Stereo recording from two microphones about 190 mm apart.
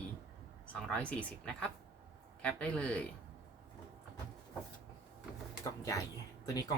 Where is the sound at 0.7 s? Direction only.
5° left (ahead or behind).